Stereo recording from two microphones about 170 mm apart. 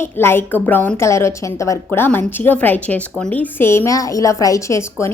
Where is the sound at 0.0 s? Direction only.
15° left (ahead or behind).